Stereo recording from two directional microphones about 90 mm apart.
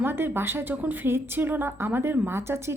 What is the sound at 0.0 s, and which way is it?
A woman's voice, 25° right (ahead or behind).